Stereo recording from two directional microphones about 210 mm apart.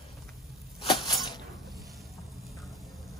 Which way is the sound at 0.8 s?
20° left (ahead or behind).